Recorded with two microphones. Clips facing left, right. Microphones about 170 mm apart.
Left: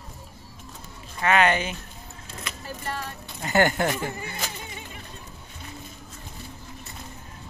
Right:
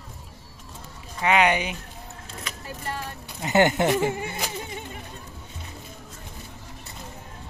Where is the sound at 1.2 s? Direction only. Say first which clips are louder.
Even; 15° right (ahead or behind).